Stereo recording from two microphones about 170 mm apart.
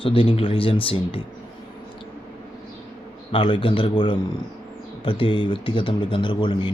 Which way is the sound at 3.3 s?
30° left (ahead or behind).